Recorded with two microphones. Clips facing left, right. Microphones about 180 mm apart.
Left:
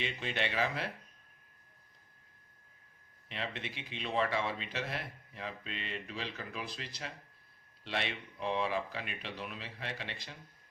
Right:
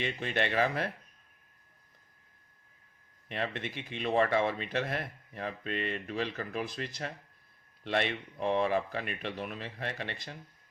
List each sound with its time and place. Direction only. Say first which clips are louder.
0.0 s speech: right 4 dB; 50° right (ahead or behind)
3.2 s speech: right 5 dB; 50° right (ahead or behind)